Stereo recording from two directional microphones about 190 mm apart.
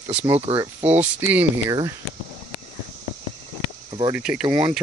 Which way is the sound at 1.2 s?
10° right (ahead or behind).